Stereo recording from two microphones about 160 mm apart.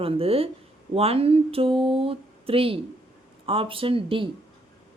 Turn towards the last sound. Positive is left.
turn(degrees=-35)  # may be behind; listen again after turning